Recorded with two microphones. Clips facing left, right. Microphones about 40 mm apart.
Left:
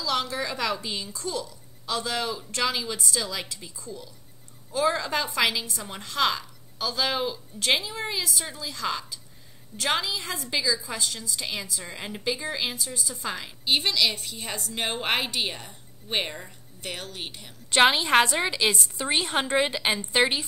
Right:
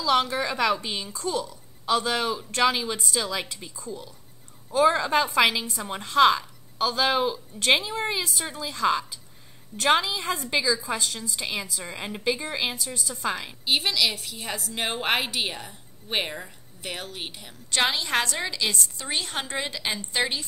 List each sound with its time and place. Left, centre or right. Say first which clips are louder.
0.0 s a woman's voice: right 5 dB; right
12.7 s a woman's voice: right 1 dB; centre
13.2 s a woman's voice: right 7 dB; centre
13.7 s a woman's voice: even; centre
17.6 s a woman's voice: left 5 dB; left